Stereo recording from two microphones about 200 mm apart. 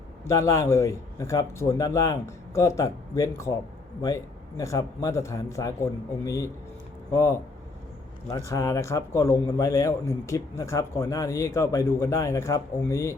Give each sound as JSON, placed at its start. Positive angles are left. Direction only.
{"t": 0.3, "sound": "speech", "side_deg": 15}